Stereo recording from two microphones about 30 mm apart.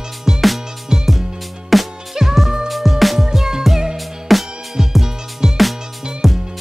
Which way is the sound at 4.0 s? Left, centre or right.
Centre.